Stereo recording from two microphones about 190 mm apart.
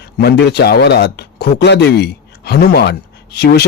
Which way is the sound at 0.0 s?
60° left (ahead or behind).